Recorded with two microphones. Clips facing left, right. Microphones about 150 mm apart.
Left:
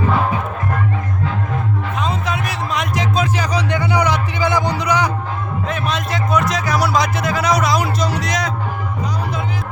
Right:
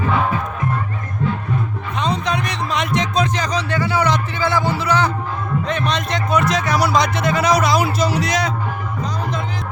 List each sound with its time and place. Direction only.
2.0 s music: 5° left (ahead or behind)